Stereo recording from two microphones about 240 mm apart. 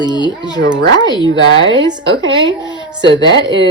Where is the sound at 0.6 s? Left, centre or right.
Right.